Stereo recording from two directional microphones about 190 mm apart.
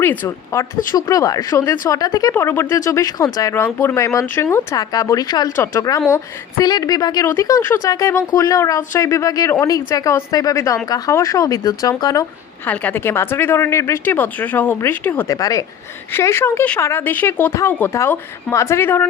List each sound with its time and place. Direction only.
0.0 s speech: 10° left (ahead or behind)
12.6 s speech: 10° left (ahead or behind)